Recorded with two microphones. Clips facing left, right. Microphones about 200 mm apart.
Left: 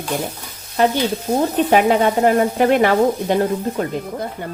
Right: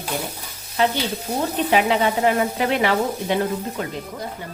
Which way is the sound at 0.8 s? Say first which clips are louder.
Left 4 dB; 45° left (ahead or behind).